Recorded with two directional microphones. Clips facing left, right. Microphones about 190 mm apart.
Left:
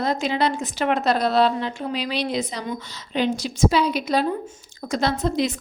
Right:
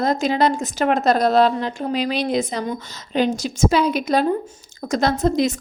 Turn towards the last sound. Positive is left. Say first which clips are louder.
# right 4 dB
turn(degrees=-45)  # may be behind; listen again after turning